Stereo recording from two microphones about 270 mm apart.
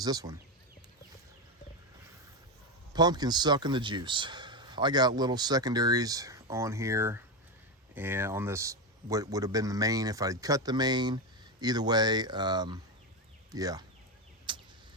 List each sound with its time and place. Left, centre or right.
0.0 s speech: centre
2.9 s speech: centre
14.5 s a sound: centre